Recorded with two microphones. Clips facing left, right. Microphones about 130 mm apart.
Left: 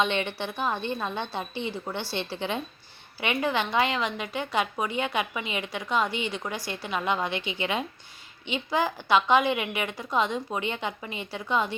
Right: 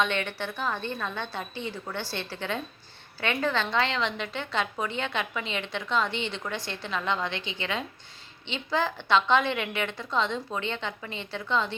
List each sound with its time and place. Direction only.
0.0 s a woman's voice: 20° left (ahead or behind)